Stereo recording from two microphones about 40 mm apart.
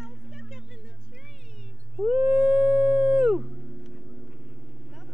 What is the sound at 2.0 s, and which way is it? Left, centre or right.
Howl, right.